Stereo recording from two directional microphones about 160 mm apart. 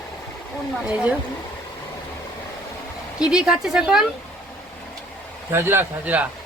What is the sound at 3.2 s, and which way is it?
Speech, 5° right (ahead or behind).